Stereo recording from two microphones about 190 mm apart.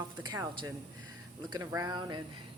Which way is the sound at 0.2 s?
20° right (ahead or behind).